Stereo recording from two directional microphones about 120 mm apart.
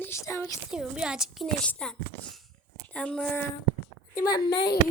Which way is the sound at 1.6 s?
5° left (ahead or behind).